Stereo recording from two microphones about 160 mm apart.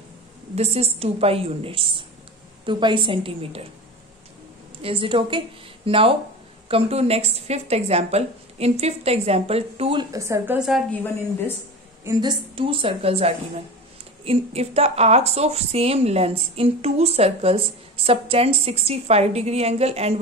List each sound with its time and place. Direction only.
0.6 s a woman's voice: 40° right (ahead or behind)
4.8 s a woman's voice: 35° right (ahead or behind)
10.1 s a woman's voice: 20° right (ahead or behind)
12.0 s a woman's voice: 25° right (ahead or behind); by 20.2 s 40° right (ahead or behind)